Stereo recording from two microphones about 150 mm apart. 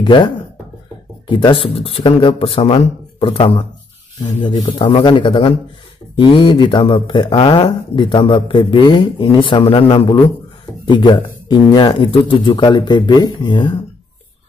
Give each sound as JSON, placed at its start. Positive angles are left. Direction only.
{"t": 0.0, "sound": "speech", "side_deg": 30}